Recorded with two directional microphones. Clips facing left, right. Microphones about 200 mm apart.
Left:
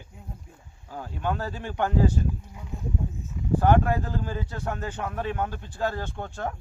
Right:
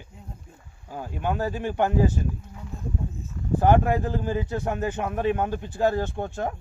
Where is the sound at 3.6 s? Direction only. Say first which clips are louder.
Right 2 dB; 15° right (ahead or behind).